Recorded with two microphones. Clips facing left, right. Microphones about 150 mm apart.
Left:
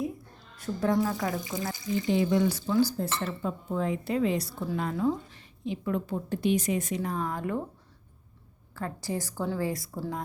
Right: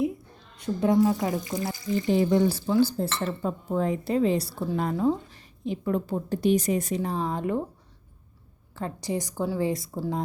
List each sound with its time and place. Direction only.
0.5 s a woman's voice: 20° right (ahead or behind)
1.5 s speech: 40° right (ahead or behind)
3.2 s speech: 40° right (ahead or behind); by 7.6 s 20° right (ahead or behind)
8.7 s a woman's voice: 20° right (ahead or behind)